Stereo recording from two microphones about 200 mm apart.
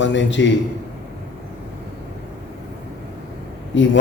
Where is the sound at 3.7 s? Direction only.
65° left (ahead or behind).